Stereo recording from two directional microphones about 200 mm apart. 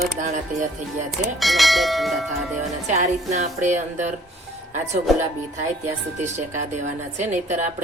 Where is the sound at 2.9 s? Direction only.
35° right (ahead or behind).